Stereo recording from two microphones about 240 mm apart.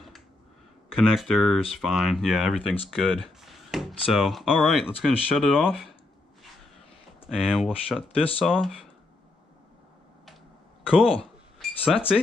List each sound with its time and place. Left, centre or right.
0.9 s speech: centre
7.2 s speech: centre
8.2 s speech: left
8.5 s speech: centre
11.6 s chink: centre